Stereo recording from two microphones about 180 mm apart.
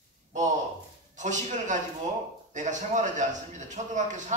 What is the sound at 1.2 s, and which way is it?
A man's voice, 40° right (ahead or behind).